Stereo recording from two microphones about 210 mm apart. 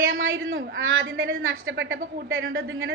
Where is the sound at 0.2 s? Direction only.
70° right (ahead or behind).